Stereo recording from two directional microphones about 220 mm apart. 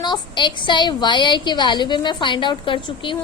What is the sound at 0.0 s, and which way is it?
A woman's voice, 20° left (ahead or behind).